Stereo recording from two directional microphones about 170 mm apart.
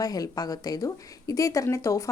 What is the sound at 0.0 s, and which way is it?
A woman's voice, 20° left (ahead or behind).